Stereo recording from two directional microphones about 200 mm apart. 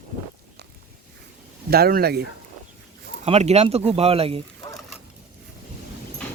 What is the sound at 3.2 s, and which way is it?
Speech, 30° right (ahead or behind).